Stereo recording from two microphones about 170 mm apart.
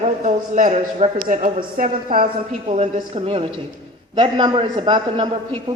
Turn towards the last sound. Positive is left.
turn(degrees=-30)  # may be behind; listen again after turning